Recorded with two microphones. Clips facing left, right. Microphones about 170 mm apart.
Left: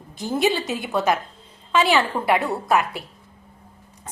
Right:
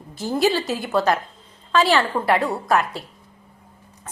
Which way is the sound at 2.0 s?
20° left (ahead or behind).